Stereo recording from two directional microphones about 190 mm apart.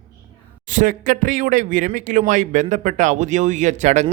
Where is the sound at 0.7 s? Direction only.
45° right (ahead or behind).